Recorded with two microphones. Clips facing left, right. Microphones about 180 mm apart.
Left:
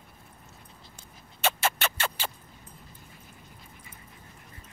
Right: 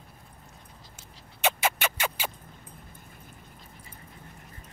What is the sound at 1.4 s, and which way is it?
Music, 10° right (ahead or behind).